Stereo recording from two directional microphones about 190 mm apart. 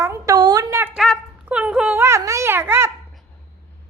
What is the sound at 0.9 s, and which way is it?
Speech, 5° right (ahead or behind).